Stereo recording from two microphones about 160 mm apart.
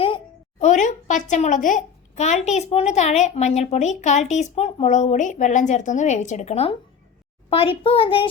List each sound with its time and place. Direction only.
0.6 s a child's voice: 50° left (ahead or behind)